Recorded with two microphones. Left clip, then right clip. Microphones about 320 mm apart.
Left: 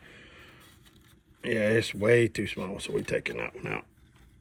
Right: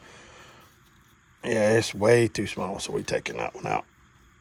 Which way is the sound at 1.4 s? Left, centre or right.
Centre.